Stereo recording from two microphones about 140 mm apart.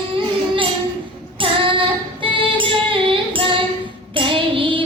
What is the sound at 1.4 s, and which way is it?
Music, 35° right (ahead or behind).